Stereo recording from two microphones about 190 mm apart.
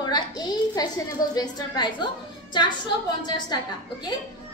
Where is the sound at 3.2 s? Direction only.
20° left (ahead or behind).